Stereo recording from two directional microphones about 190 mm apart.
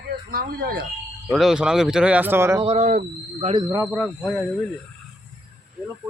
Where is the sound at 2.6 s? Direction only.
35° right (ahead or behind).